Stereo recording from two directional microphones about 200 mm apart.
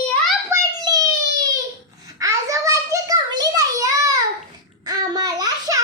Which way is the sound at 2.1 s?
15° right (ahead or behind).